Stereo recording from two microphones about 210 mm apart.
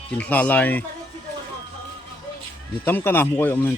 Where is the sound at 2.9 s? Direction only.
10° left (ahead or behind).